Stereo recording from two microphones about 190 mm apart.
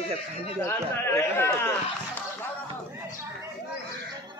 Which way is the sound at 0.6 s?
15° left (ahead or behind).